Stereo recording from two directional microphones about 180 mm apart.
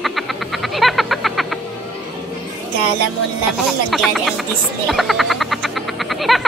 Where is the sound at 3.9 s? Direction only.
Centre (ahead or behind).